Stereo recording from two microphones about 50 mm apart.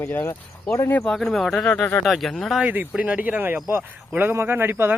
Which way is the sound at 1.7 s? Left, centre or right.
Left.